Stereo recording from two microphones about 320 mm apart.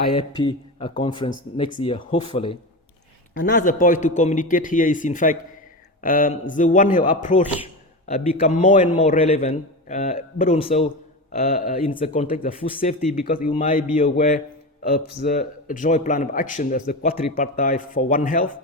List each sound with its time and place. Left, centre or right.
0.1 s speech: centre
3.3 s a man's voice: left